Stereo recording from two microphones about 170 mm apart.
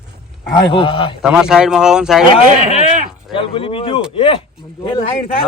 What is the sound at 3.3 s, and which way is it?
Speech, 30° left (ahead or behind).